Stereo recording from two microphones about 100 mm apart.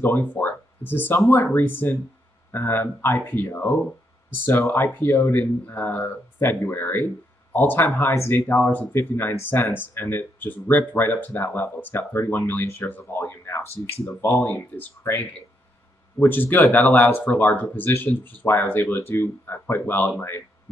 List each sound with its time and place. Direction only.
0.0 s speech: 20° left (ahead or behind)